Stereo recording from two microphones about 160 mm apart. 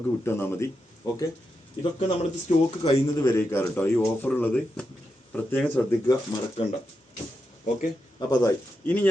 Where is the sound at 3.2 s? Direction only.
15° left (ahead or behind).